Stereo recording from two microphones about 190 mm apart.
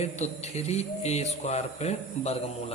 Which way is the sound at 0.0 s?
35° left (ahead or behind).